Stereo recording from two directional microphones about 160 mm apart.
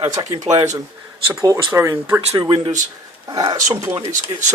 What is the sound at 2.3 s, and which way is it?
Speech, 30° right (ahead or behind).